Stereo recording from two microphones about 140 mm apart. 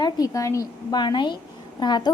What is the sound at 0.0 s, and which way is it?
A woman's voice, 25° left (ahead or behind).